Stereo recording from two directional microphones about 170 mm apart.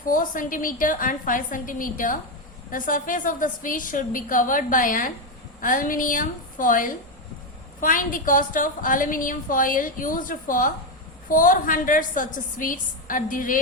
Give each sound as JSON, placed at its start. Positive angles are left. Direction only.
{"t": 0.0, "sound": "a woman's voice", "side_deg": 55}